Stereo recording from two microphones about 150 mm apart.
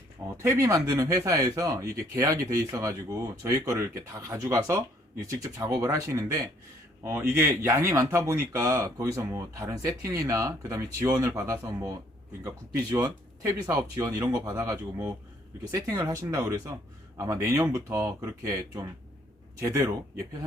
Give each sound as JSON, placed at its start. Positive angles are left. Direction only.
{"t": 0.4, "sound": "speech", "side_deg": -20}